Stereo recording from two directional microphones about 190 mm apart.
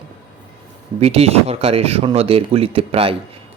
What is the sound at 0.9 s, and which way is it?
Speech, 35° right (ahead or behind).